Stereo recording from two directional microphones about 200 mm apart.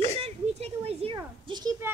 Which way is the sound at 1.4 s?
20° right (ahead or behind).